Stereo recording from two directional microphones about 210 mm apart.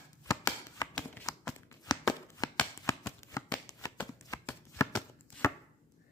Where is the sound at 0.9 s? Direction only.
5° left (ahead or behind).